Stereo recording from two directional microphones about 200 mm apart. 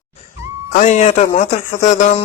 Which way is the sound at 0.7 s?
35° left (ahead or behind).